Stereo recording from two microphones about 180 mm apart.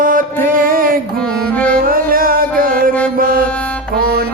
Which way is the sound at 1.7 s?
50° right (ahead or behind).